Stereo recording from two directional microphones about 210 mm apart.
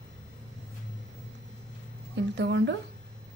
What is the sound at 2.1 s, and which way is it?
Speech, 55° right (ahead or behind).